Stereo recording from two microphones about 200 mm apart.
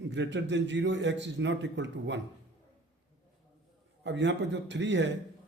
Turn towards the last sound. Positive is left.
turn(degrees=-65)  # may be behind; listen again after turning